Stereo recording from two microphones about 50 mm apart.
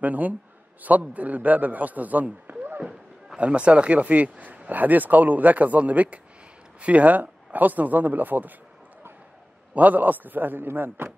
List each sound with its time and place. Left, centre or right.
0.0 s speech: right
9.8 s speech: right